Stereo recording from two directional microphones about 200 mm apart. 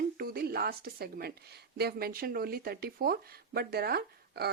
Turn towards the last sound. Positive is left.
turn(degrees=-50)  # may be behind; listen again after turning